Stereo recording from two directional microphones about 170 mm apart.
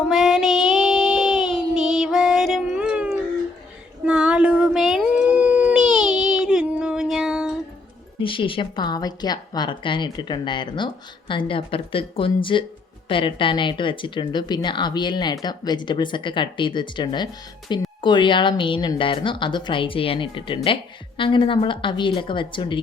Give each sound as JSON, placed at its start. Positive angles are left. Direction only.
{"t": 0.1, "sound": "child singing", "side_deg": 0}
{"t": 4.0, "sound": "howl", "side_deg": -5}
{"t": 8.2, "sound": "a woman's voice", "side_deg": 30}